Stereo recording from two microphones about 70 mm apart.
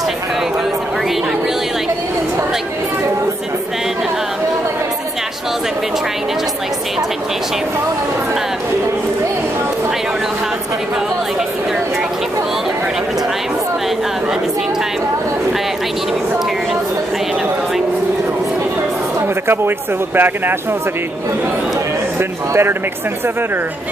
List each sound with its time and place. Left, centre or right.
19.4 s speech: right
22.5 s speech: right